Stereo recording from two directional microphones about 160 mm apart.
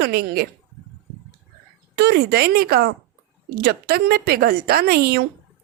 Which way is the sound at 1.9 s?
85° right.